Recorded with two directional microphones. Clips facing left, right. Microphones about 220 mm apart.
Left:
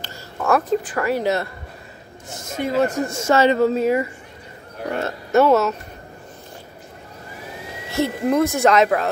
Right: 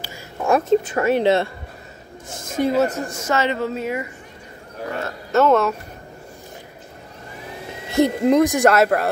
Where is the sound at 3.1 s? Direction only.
25° left (ahead or behind).